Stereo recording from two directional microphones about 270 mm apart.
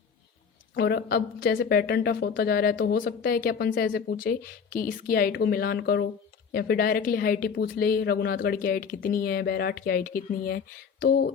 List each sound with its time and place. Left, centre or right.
0.7 s a woman's voice: left